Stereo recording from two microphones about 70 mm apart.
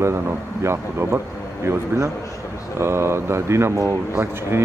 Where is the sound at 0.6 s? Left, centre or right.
Right.